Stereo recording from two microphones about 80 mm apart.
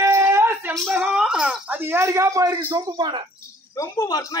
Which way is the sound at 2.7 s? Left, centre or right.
Right.